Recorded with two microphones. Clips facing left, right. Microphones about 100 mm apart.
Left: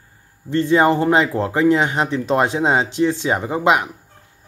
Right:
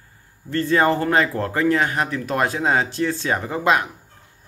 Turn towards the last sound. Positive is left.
turn(degrees=20)  # may be behind; listen again after turning